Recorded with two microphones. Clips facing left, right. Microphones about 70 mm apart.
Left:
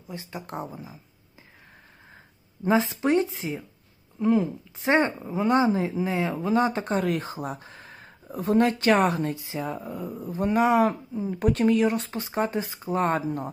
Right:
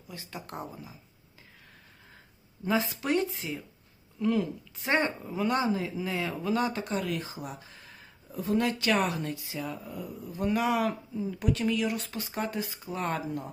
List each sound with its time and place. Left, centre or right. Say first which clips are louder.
0.1 s speech: left 5 dB; left
2.6 s speech: left 6 dB; left